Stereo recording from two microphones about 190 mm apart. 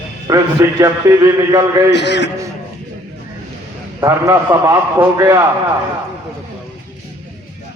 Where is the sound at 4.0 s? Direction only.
15° right (ahead or behind).